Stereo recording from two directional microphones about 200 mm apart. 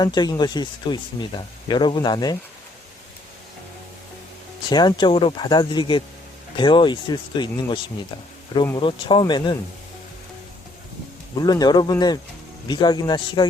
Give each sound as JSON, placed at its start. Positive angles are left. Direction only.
{"t": 0.0, "sound": "speech", "side_deg": 20}
{"t": 4.7, "sound": "speech", "side_deg": 20}
{"t": 11.4, "sound": "speech", "side_deg": 20}